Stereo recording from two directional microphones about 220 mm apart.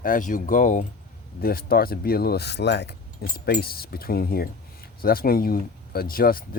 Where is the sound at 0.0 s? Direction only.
40° left (ahead or behind).